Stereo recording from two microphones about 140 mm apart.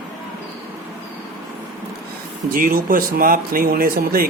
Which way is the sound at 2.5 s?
85° right.